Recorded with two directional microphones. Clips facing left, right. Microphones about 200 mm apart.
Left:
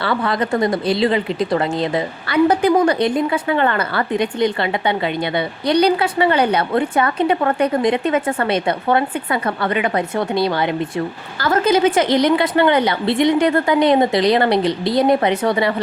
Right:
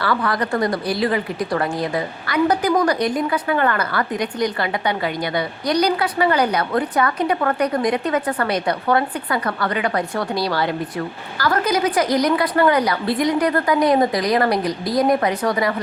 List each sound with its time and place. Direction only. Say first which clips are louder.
0.0 s speech: left 2 dB; 25° left (ahead or behind)